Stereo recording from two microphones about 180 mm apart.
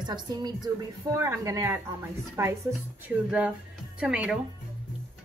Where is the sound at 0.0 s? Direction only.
25° right (ahead or behind).